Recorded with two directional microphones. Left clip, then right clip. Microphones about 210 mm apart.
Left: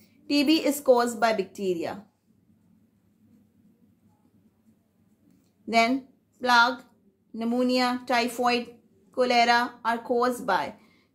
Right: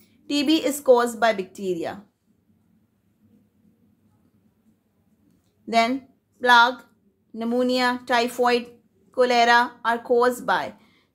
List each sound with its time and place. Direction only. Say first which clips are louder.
0.0 s a woman's voice: even; 25° right (ahead or behind)
5.7 s a woman's voice: right 2 dB; 25° right (ahead or behind)